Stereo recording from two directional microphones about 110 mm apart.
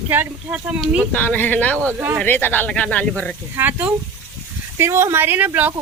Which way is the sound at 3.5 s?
20° right (ahead or behind).